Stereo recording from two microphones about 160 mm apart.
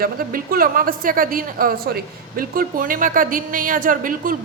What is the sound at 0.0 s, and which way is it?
Speech, 65° right (ahead or behind).